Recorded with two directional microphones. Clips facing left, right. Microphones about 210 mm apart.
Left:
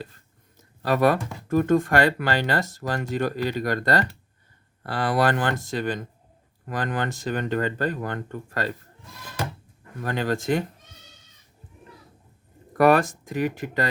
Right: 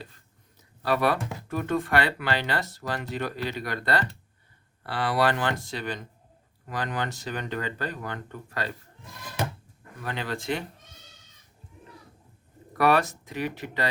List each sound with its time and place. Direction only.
0.8 s speech: 45° left (ahead or behind)
10.0 s speech: 45° left (ahead or behind)
12.7 s speech: 45° left (ahead or behind)